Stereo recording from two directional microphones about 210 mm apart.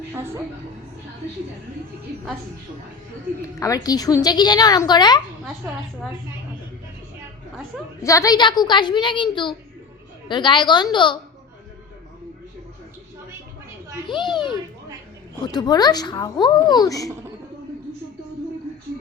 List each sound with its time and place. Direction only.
0.1 s a woman's voice: 10° right (ahead or behind)
3.6 s a woman's voice: 15° left (ahead or behind)
5.6 s a woman's voice: 10° right (ahead or behind)
8.0 s a woman's voice: 15° left (ahead or behind)
14.1 s a woman's voice: 20° left (ahead or behind)
15.5 s a woman's voice: 20° left (ahead or behind)